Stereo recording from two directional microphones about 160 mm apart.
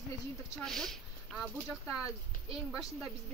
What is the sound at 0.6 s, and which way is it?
Speech, 5° left (ahead or behind).